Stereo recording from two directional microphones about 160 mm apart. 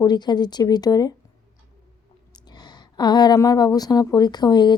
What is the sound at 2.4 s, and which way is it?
A woman's voice, 25° left (ahead or behind).